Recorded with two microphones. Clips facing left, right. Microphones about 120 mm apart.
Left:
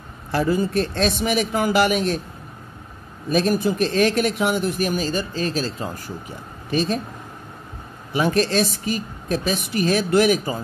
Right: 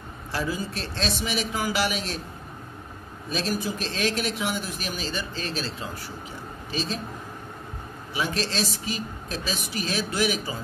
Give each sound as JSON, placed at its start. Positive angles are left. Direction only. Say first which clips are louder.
{"t": 0.3, "sound": "speech", "louder": "left 9 dB", "side_deg": 55}
{"t": 3.3, "sound": "speech", "louder": "left 9 dB", "side_deg": 55}
{"t": 8.1, "sound": "speech", "louder": "left 9 dB", "side_deg": 50}